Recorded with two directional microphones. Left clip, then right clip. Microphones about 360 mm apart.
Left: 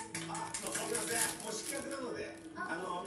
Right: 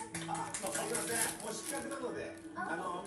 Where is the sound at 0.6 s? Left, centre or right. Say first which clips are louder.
Right 1 dB; centre.